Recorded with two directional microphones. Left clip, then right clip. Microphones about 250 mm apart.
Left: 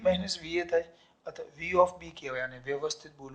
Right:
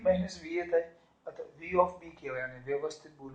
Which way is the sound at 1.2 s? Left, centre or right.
Left.